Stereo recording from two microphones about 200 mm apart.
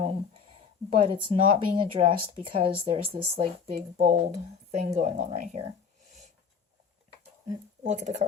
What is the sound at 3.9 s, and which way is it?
Speech, 40° right (ahead or behind).